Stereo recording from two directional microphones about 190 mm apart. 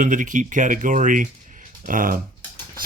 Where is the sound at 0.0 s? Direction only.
45° right (ahead or behind).